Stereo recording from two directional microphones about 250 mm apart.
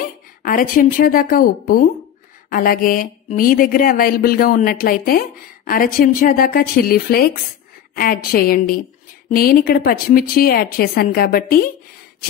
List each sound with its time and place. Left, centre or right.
0.4 s speech: left